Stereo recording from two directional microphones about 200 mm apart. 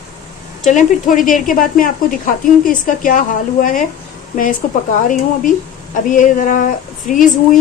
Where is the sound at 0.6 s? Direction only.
40° left (ahead or behind).